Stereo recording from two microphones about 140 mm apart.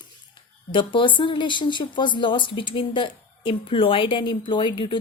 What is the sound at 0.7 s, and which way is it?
Speech, 35° left (ahead or behind).